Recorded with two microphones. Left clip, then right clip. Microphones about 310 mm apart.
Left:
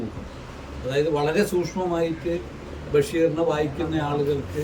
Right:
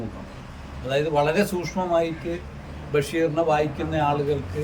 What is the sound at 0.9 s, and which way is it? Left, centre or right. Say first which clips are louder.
Speech: right 1 dB; centre.